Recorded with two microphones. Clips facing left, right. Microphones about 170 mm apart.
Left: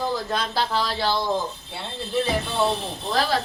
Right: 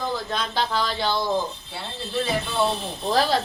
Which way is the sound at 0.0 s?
5° left (ahead or behind).